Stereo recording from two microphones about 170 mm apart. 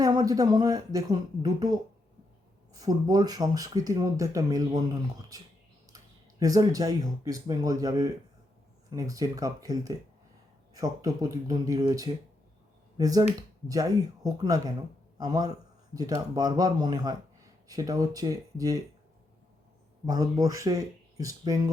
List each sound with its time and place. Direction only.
0.0 s speech: 20° right (ahead or behind)
6.4 s speech: 20° right (ahead or behind)
20.1 s speech: 20° right (ahead or behind)